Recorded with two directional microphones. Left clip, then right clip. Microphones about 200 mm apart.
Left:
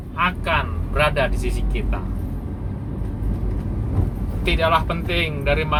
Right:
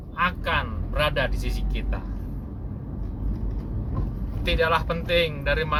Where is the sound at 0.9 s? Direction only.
35° right (ahead or behind).